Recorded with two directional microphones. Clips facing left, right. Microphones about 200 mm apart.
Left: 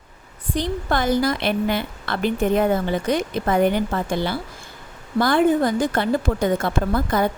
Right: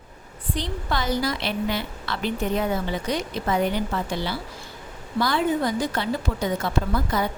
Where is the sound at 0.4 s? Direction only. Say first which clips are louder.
Left 5 dB; 45° left (ahead or behind).